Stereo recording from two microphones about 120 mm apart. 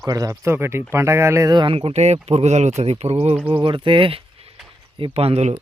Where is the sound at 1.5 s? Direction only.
45° right (ahead or behind).